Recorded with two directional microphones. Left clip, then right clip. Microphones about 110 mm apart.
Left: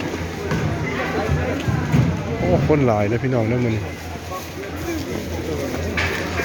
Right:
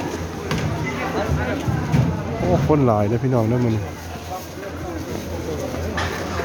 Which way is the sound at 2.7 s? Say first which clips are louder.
Even; 50° right (ahead or behind).